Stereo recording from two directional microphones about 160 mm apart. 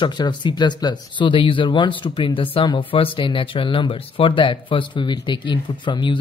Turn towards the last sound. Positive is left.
turn(degrees=30)  # may be behind; listen again after turning